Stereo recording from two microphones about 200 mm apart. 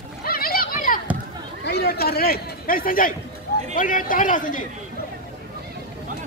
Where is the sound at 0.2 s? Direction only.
45° left (ahead or behind).